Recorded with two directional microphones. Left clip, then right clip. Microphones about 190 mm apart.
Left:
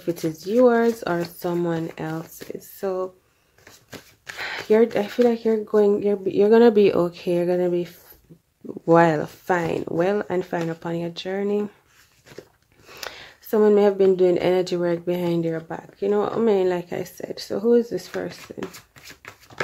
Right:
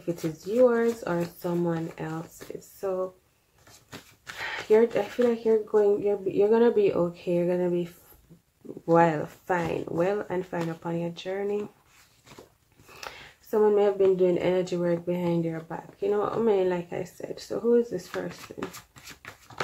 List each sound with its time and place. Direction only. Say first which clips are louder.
0.7 s speech: left 5 dB; 45° left (ahead or behind)
4.4 s speech: left 3 dB; 45° left (ahead or behind)
12.9 s speech: left 5 dB; 45° left (ahead or behind)